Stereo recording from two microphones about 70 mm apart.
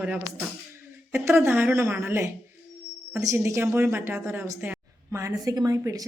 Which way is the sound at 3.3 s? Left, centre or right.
Right.